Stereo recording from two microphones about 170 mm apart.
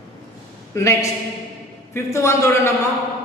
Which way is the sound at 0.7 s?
15° left (ahead or behind).